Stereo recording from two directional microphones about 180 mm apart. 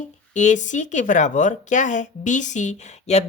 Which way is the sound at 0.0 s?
45° left (ahead or behind).